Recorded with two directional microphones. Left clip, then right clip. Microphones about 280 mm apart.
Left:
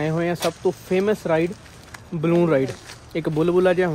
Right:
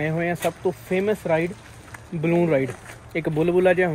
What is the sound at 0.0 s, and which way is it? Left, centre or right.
Speech, centre.